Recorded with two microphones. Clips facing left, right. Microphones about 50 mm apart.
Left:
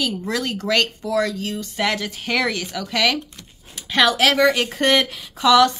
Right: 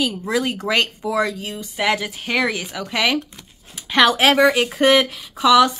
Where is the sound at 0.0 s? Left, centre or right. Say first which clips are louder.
Right 3 dB; centre.